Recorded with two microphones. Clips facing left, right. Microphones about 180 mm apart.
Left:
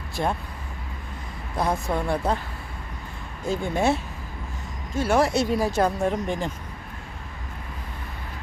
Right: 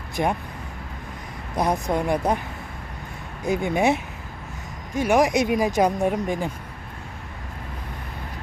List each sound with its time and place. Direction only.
0.2 s speech: 15° right (ahead or behind)
1.5 s speech: 20° right (ahead or behind)
3.4 s speech: 15° right (ahead or behind)